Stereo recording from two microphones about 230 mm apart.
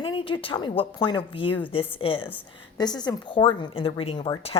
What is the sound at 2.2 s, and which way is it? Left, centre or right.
A woman's voice, centre.